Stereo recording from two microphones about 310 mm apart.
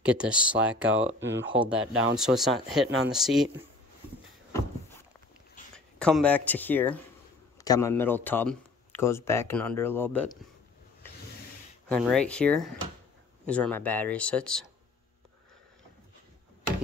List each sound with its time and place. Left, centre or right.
0.0 s speech: centre
1.2 s speech: right
1.5 s speech: centre
5.9 s speech: centre
11.9 s speech: centre